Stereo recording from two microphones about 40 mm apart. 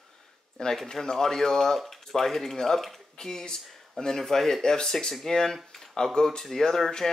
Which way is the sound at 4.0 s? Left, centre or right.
Centre.